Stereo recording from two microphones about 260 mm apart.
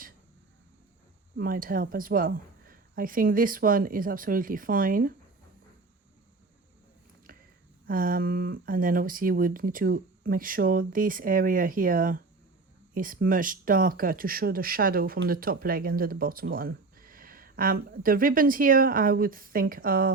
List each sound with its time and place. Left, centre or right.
1.4 s speech: right
7.3 s a sound: right
7.9 s speech: right